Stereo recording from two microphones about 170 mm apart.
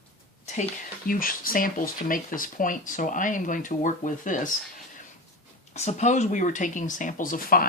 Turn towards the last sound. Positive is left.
turn(degrees=60)  # may be behind; listen again after turning